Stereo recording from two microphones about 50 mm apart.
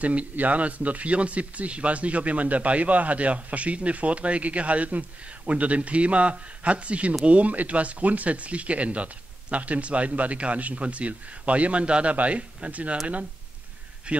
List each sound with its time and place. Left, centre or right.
0.0 s speech: right
14.1 s speech: right